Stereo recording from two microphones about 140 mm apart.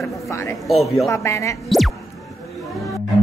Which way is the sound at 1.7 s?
Centre (ahead or behind).